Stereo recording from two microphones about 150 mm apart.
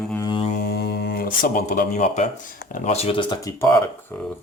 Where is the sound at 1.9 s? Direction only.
50° left (ahead or behind).